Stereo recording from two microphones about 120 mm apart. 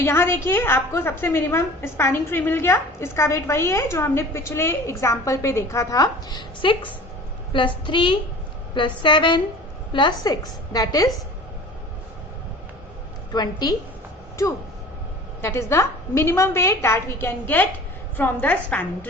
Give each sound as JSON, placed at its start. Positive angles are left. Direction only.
{"t": 0.0, "sound": "a woman's voice", "side_deg": 20}
{"t": 6.6, "sound": "a woman's voice", "side_deg": 45}
{"t": 13.3, "sound": "a woman's voice", "side_deg": 35}
{"t": 15.4, "sound": "a woman's voice", "side_deg": 20}